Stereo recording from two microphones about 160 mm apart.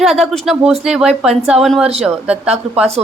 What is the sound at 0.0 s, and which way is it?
A woman's voice, centre (ahead or behind).